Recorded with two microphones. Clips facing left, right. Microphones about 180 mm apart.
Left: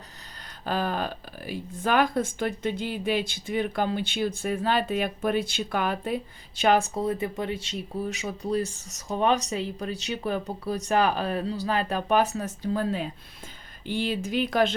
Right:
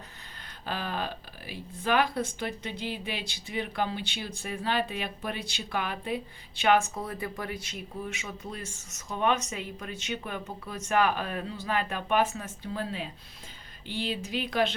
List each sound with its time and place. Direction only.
0.6 s speech: 45° left (ahead or behind)